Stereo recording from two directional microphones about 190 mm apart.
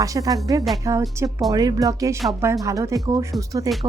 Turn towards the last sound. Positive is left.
turn(degrees=-20)  # may be behind; listen again after turning